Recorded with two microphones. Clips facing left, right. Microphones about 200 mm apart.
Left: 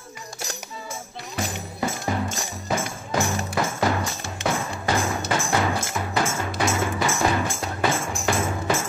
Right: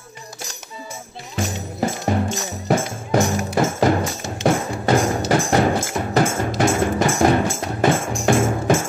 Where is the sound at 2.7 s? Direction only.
55° right (ahead or behind).